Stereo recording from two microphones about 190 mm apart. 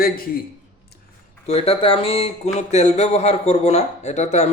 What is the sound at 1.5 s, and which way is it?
Speech, 30° left (ahead or behind).